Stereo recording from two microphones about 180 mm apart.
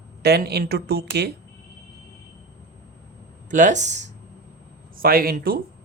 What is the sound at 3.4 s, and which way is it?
Speech, 45° right (ahead or behind).